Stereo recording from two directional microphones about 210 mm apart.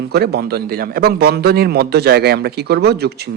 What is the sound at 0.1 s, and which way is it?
Speech, 50° right (ahead or behind).